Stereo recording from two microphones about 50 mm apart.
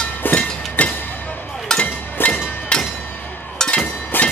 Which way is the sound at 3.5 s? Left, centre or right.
Centre.